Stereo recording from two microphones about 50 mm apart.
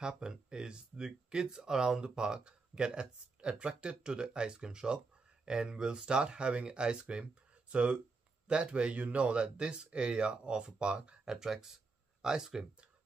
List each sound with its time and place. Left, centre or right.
0.0 s speech: centre
11.3 s speech: centre